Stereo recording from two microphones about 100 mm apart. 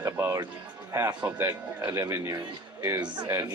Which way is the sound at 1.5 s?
35° right (ahead or behind).